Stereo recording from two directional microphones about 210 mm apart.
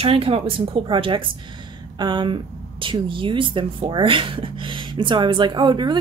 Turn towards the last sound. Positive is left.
turn(degrees=-20)  # may be behind; listen again after turning